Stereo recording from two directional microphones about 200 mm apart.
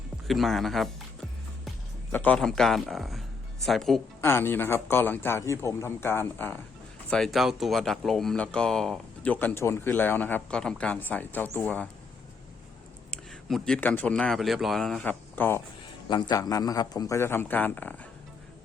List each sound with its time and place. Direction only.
0.3 s speech: centre (ahead or behind)
2.1 s speech: 5° left (ahead or behind)
4.2 s a man's voice: 10° left (ahead or behind)
13.1 s speech: 5° left (ahead or behind)
16.0 s a man's voice: 20° left (ahead or behind)